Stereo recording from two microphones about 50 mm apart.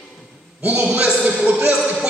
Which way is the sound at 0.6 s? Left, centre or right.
Right.